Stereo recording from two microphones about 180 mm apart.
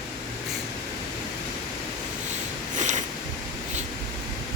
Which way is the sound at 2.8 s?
40° right (ahead or behind).